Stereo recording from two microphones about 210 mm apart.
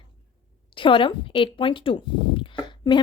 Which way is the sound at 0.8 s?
25° left (ahead or behind).